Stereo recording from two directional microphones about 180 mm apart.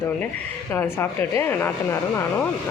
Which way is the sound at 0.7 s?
10° left (ahead or behind).